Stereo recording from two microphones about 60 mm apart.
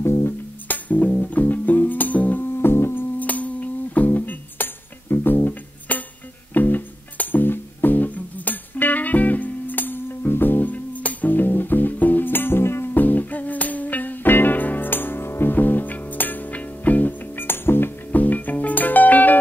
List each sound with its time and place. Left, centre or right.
0.0 s music: left
0.7 s music: left
2.6 s music: left